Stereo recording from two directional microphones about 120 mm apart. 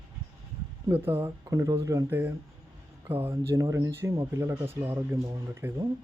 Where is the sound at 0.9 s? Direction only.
20° right (ahead or behind).